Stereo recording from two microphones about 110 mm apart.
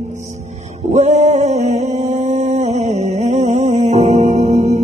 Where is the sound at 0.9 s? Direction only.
90° right.